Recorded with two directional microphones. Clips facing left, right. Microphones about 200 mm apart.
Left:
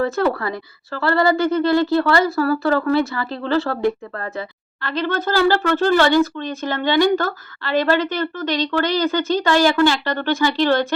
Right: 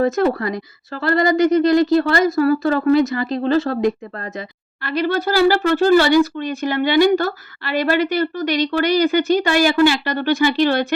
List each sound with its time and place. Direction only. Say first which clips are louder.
0.0 s speech: right 2 dB; 20° right (ahead or behind)